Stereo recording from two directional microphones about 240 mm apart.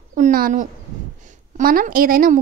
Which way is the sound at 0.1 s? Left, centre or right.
Right.